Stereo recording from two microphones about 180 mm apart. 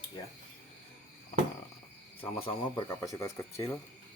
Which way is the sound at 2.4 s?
20° left (ahead or behind).